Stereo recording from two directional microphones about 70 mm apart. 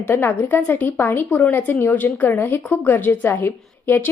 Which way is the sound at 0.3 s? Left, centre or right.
Left.